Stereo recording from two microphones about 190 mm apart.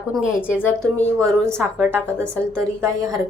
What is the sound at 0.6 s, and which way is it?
Speech, 10° left (ahead or behind).